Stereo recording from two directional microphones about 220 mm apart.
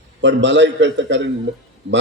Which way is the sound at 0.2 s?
55° right (ahead or behind).